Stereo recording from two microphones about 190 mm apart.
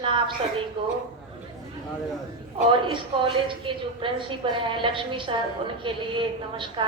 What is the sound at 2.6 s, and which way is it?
A woman's voice, 25° right (ahead or behind).